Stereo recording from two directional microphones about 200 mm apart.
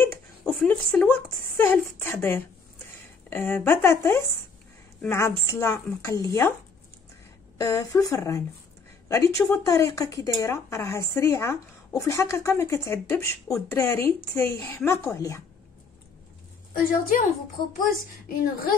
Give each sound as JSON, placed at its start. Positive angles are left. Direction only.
{"t": 0.0, "sound": "a sound", "side_deg": 10}
{"t": 3.3, "sound": "speech", "side_deg": 10}
{"t": 7.5, "sound": "speech", "side_deg": 15}
{"t": 18.3, "sound": "a woman's voice", "side_deg": 45}